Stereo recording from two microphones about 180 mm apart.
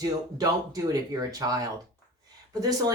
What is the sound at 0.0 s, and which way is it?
Speech, 20° right (ahead or behind).